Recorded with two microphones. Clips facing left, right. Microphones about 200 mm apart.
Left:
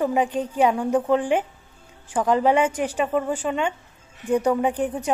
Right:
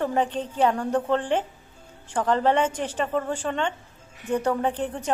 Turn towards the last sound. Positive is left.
turn(degrees=10)  # may be behind; listen again after turning